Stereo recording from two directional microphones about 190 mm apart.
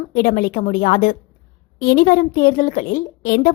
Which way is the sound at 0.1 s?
50° left (ahead or behind).